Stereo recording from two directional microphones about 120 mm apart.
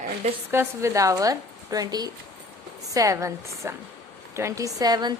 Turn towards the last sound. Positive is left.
turn(degrees=-35)  # may be behind; listen again after turning